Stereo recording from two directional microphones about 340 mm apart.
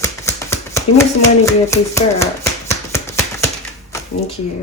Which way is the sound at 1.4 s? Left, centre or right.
Centre.